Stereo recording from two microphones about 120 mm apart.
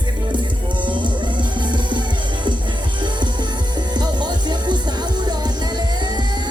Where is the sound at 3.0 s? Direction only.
40° right (ahead or behind).